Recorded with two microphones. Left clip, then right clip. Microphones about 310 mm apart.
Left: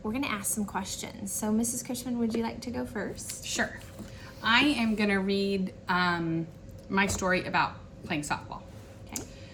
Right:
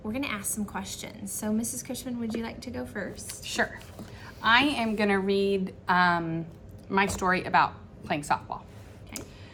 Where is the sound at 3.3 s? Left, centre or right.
Centre.